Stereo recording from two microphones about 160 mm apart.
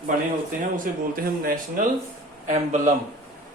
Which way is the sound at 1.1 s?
65° right (ahead or behind).